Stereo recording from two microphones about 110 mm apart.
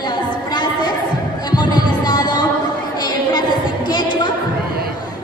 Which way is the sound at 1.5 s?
40° left (ahead or behind).